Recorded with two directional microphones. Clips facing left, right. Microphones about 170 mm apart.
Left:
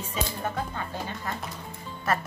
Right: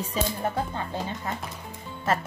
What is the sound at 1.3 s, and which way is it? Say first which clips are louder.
Speech: right 1 dB; 20° right (ahead or behind).